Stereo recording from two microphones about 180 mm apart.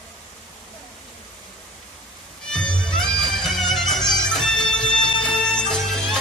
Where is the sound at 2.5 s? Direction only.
5° left (ahead or behind).